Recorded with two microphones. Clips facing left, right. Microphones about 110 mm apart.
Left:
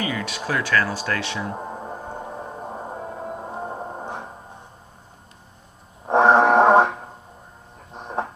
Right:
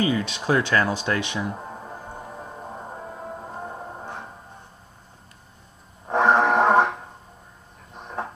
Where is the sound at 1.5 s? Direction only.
25° left (ahead or behind).